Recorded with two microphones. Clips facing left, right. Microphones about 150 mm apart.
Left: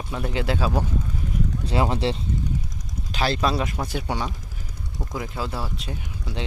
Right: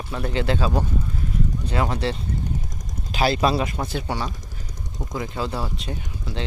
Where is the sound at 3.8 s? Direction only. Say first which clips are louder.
Even; 15° left (ahead or behind).